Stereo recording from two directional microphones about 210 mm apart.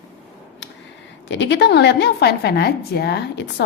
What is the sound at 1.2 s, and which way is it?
A woman's voice, 60° left (ahead or behind).